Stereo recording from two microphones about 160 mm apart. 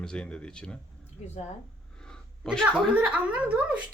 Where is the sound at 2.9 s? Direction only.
10° right (ahead or behind).